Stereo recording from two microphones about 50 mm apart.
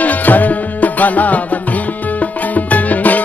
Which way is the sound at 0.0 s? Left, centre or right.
Left.